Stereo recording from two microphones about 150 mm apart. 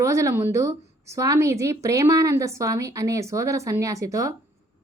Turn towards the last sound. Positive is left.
turn(degrees=-20)  # may be behind; listen again after turning